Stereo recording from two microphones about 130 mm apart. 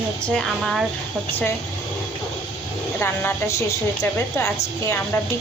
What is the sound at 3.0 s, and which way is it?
A woman's voice, 20° left (ahead or behind).